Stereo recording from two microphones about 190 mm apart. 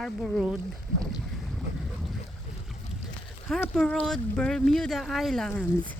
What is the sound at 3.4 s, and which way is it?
Speech, centre (ahead or behind).